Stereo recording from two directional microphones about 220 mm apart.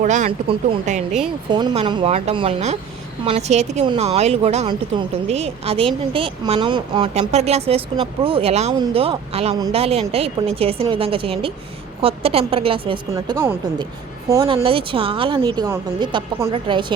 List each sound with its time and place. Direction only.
0.0 s speech: 35° right (ahead or behind)
1.5 s speech: 20° right (ahead or behind)
14.5 s speech: 25° right (ahead or behind)